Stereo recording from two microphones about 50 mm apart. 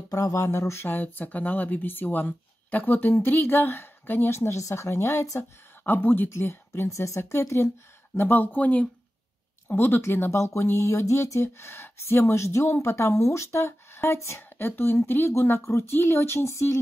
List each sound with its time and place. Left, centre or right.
0.1 s speech: left
0.8 s a woman's voice: left
4.4 s speech: left
5.9 s speech: left
6.3 s speech: left
7.2 s speech: left
8.2 s speech: left
9.7 s a woman's voice: left
10.4 s speech: left
14.6 s a woman's voice: left
15.6 s speech: left